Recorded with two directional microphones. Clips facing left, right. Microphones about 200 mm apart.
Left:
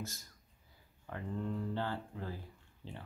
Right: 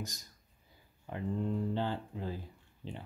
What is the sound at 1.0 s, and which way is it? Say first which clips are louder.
Speech: right 4 dB; 20° right (ahead or behind).